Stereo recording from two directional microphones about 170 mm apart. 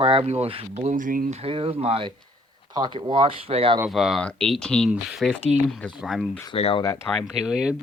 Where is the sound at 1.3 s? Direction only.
35° right (ahead or behind).